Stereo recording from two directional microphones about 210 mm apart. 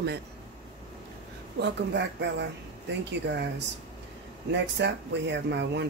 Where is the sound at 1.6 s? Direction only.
55° right (ahead or behind).